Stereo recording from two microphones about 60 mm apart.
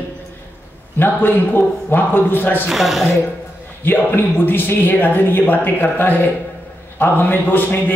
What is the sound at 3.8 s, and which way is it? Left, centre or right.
Speech, left.